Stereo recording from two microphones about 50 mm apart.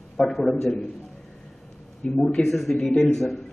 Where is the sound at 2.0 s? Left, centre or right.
Centre.